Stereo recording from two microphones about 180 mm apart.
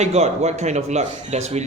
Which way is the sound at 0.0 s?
35° right (ahead or behind).